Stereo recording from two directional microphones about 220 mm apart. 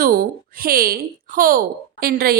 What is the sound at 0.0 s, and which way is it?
Speech, 40° right (ahead or behind).